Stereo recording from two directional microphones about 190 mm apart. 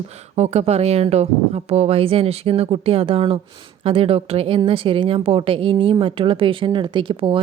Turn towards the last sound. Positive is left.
turn(degrees=-25)  # may be behind; listen again after turning